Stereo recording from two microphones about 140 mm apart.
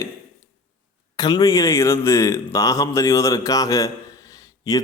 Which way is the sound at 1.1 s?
30° left (ahead or behind).